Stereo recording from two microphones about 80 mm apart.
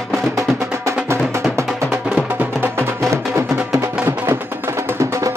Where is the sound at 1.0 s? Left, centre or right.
Right.